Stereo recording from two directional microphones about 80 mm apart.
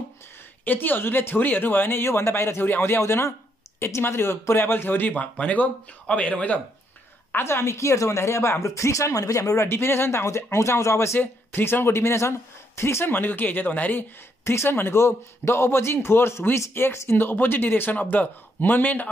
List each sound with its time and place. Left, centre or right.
0.7 s speech: left
7.3 s speech: left
11.1 s speech: left
14.4 s speech: left